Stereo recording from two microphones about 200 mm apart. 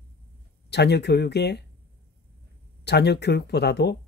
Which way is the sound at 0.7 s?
55° left (ahead or behind).